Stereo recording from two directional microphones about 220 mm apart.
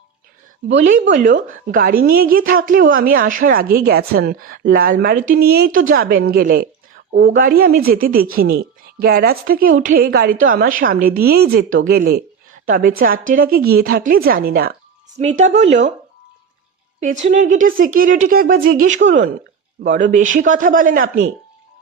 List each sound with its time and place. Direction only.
1.1 s a woman's voice: 35° right (ahead or behind)
15.2 s a woman's voice: 30° right (ahead or behind)
17.2 s a woman's voice: 35° right (ahead or behind)